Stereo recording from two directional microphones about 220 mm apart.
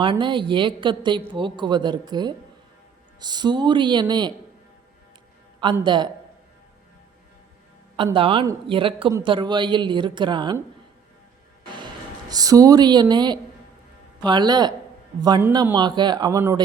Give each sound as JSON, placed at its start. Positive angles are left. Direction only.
{"t": 0.0, "sound": "a woman's voice", "side_deg": -20}
{"t": 5.8, "sound": "a woman's voice", "side_deg": -20}
{"t": 7.9, "sound": "a woman's voice", "side_deg": -25}
{"t": 12.3, "sound": "a woman's voice", "side_deg": -15}
{"t": 15.7, "sound": "a woman's voice", "side_deg": -20}